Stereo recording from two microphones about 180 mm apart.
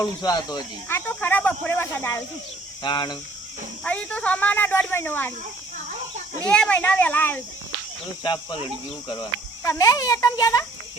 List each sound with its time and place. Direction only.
0.0 s speech: 20° left (ahead or behind)
2.8 s speech: 25° left (ahead or behind)
3.8 s speech: 5° left (ahead or behind)
6.4 s speech: 5° left (ahead or behind)
8.2 s speech: 25° left (ahead or behind)